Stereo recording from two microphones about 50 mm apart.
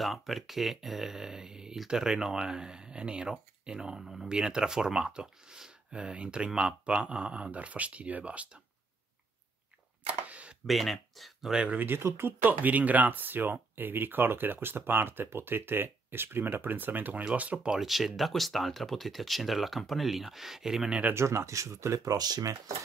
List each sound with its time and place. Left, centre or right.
0.0 s speech: centre
4.0 s speech: centre
4.3 s speech: centre
10.0 s a sound: right
10.7 s speech: centre
11.5 s speech: centre
12.0 s speech: right
12.6 s speech: right
17.4 s speech: right
17.7 s speech: centre
21.1 s speech: right